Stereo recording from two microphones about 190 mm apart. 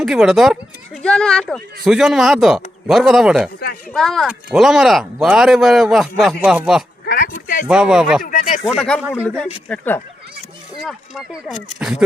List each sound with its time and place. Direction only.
0.0 s speech: 5° right (ahead or behind)
7.0 s a sound: 55° left (ahead or behind)
7.7 s speech: 5° right (ahead or behind)
8.2 s speech: 45° left (ahead or behind)
8.6 s speech: 5° left (ahead or behind)
10.8 s speech: centre (ahead or behind)